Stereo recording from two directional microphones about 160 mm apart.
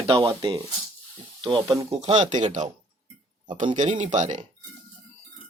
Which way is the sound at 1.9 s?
40° right (ahead or behind).